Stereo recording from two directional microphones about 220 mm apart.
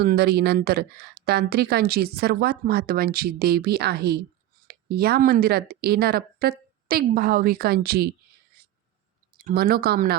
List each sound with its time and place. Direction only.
0.0 s a woman's voice: 45° right (ahead or behind)
9.4 s a woman's voice: 40° right (ahead or behind)